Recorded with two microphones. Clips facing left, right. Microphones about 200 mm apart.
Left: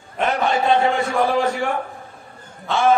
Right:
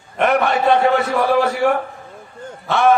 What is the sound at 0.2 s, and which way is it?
Speech, 65° right (ahead or behind).